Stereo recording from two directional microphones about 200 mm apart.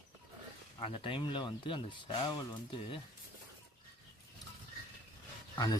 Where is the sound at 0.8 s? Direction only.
25° left (ahead or behind).